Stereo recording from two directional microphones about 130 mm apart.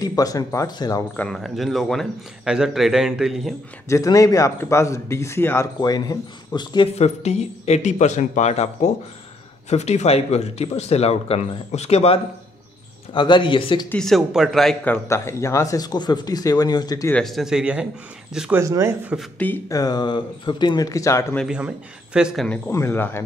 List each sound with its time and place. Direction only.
0.0 s speech: 30° left (ahead or behind)
1.1 s speech: 10° left (ahead or behind)
3.9 s speech: 25° left (ahead or behind)
5.8 s speech: 30° left (ahead or behind)
7.0 s speech: 55° left (ahead or behind)
13.1 s speech: 40° left (ahead or behind)
13.8 s speech: 5° left (ahead or behind)
14.9 s speech: 20° left (ahead or behind)
17.1 s speech: centre (ahead or behind)
18.6 s speech: 25° right (ahead or behind)
19.3 s speech: 15° left (ahead or behind)
19.7 s speech: 30° left (ahead or behind)
21.5 s speech: 5° right (ahead or behind)
22.7 s speech: 20° left (ahead or behind)